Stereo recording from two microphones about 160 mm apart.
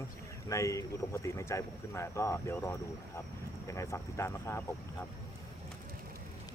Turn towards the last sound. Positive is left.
turn(degrees=15)  # may be behind; listen again after turning